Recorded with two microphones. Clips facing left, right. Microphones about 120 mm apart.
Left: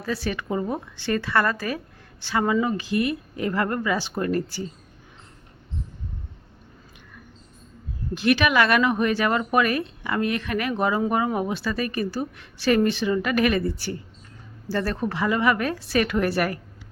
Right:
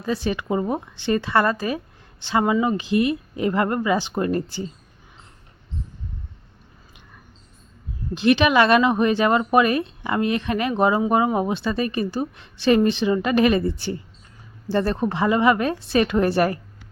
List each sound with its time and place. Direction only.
0.0 s speech: 20° right (ahead or behind)
8.1 s speech: 25° right (ahead or behind)